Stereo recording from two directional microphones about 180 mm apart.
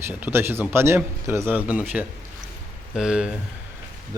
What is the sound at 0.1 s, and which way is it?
Speech, 10° right (ahead or behind).